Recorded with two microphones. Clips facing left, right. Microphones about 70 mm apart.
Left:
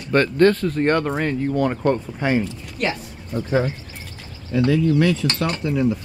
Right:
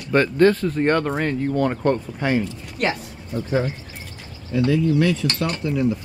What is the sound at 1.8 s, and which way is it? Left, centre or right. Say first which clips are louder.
Speech: left 1 dB; centre.